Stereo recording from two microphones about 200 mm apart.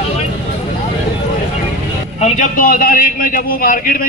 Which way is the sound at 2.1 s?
35° left (ahead or behind).